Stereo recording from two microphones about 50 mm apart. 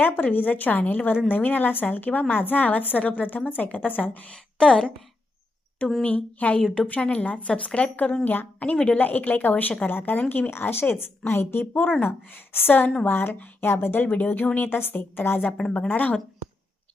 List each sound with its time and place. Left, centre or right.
0.0 s a woman's voice: left
4.3 s a woman's voice: centre
6.0 s a woman's voice: left
9.0 s a woman's voice: left
10.5 s speech: left
11.6 s a woman's voice: left
14.1 s a woman's voice: left
15.8 s a woman's voice: left